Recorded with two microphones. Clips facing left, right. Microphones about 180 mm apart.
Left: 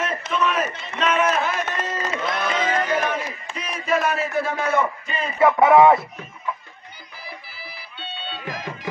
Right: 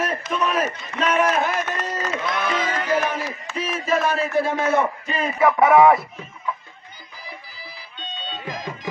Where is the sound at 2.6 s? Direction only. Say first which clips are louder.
Left 2 dB; 10° right (ahead or behind).